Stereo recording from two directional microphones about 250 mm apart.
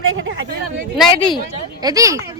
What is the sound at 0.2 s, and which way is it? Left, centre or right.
Speech, right.